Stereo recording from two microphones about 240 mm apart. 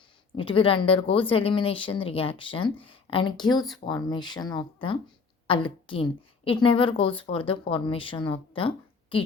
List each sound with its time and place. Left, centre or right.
0.3 s a woman's voice: left